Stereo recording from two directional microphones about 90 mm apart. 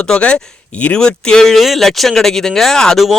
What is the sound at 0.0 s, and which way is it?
Speech, 10° left (ahead or behind).